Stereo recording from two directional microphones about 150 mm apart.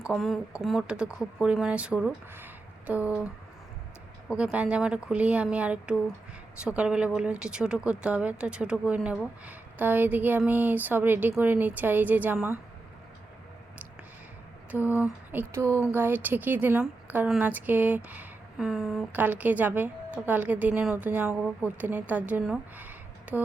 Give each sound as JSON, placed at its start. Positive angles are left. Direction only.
{"t": 0.0, "sound": "speech", "side_deg": 0}
{"t": 4.3, "sound": "speech", "side_deg": -5}
{"t": 14.7, "sound": "speech", "side_deg": -10}
{"t": 19.1, "sound": "speech", "side_deg": -10}
{"t": 22.8, "sound": "a sound", "side_deg": -10}